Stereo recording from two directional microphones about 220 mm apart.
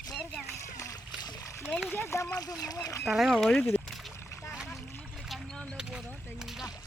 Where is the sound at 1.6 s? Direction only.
Centre (ahead or behind).